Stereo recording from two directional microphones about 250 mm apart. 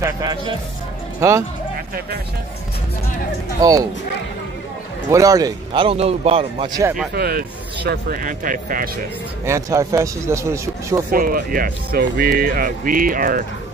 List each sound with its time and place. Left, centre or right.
0.0 s speech: centre
3.6 s speech: centre
5.1 s a man's voice: centre
6.8 s speech: centre
7.2 s speech: right
9.5 s speech: centre
11.1 s speech: right